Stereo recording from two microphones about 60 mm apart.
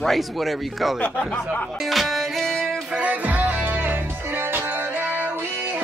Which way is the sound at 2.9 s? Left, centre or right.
Right.